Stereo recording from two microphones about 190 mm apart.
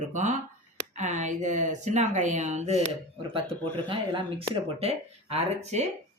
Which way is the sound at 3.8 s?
30° right (ahead or behind).